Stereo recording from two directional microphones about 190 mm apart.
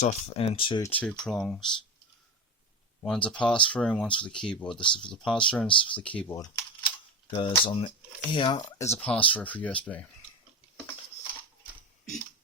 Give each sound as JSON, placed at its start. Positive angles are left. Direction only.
{"t": 0.0, "sound": "speech", "side_deg": 30}
{"t": 0.9, "sound": "speech", "side_deg": 5}
{"t": 3.0, "sound": "speech", "side_deg": 5}
{"t": 4.8, "sound": "speech", "side_deg": 25}
{"t": 5.1, "sound": "speech", "side_deg": 5}
{"t": 7.3, "sound": "speech", "side_deg": 25}